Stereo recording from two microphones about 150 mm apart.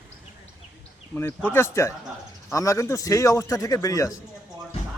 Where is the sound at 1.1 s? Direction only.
15° left (ahead or behind).